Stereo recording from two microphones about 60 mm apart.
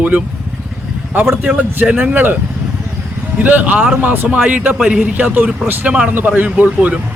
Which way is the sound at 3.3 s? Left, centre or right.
Right.